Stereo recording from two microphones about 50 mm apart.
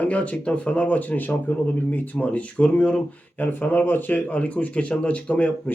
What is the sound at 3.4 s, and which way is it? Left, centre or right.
Speech, left.